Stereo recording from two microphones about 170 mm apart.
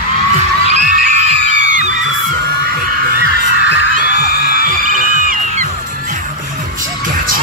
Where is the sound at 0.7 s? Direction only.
45° right (ahead or behind).